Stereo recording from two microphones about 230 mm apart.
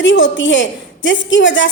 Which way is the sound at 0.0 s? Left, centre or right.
Left.